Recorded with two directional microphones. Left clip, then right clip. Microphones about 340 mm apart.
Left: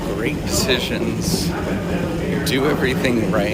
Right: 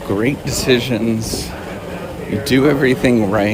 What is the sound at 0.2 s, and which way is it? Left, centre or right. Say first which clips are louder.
Speech: right 2 dB; centre.